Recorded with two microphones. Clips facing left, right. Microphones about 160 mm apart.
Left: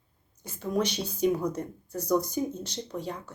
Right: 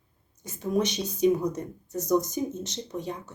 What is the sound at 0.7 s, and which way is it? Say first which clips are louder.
Speech: right 2 dB; 20° right (ahead or behind).